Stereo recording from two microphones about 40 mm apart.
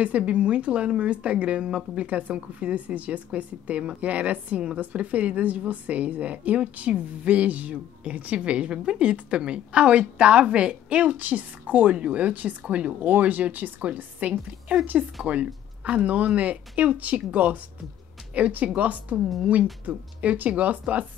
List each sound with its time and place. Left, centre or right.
0.0 s a woman's voice: right
11.1 s a woman's voice: right